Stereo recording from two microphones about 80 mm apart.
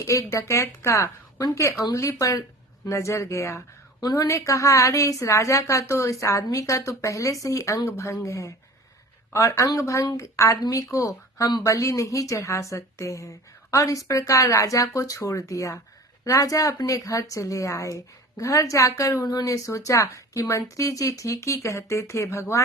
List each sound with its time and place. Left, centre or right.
0.0 s a woman's voice: left
4.0 s a woman's voice: left
19.2 s a woman's voice: left